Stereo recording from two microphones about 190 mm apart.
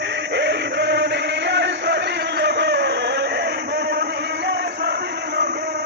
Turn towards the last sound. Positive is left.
turn(degrees=-65)  # may be behind; listen again after turning